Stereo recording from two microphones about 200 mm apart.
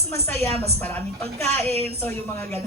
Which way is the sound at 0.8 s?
10° left (ahead or behind).